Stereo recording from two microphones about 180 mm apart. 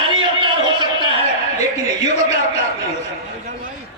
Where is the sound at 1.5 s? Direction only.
40° left (ahead or behind).